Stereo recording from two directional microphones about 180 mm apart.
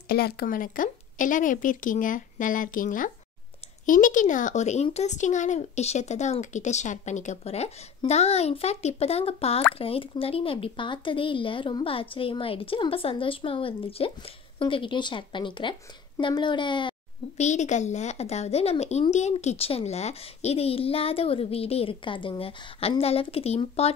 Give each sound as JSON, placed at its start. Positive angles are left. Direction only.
{"t": 0.1, "sound": "a woman's voice", "side_deg": 60}
{"t": 17.4, "sound": "speech", "side_deg": 40}